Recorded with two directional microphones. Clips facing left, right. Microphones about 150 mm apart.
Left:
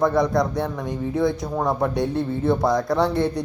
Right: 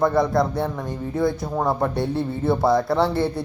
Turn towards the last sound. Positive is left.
turn(degrees=-5)  # may be behind; listen again after turning